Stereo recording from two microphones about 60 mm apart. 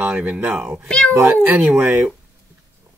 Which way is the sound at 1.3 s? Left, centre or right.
Right.